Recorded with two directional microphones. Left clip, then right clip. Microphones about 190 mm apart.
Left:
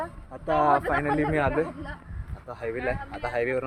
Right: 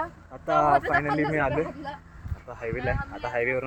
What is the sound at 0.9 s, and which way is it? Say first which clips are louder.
Speech: right 1 dB; 45° right (ahead or behind).